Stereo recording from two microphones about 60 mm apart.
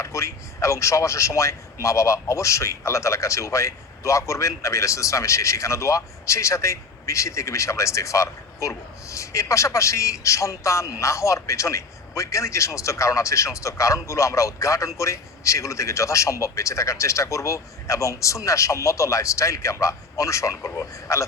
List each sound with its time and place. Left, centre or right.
0.0 s speech: left